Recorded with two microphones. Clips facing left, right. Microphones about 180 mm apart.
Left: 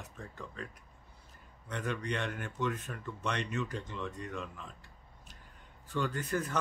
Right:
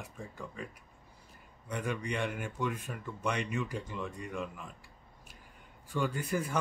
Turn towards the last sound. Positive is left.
turn(degrees=-10)  # may be behind; listen again after turning